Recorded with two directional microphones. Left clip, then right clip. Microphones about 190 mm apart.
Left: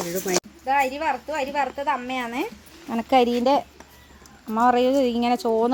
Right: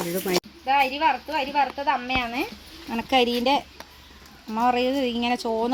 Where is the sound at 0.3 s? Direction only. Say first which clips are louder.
Right 1 dB; 10° left (ahead or behind).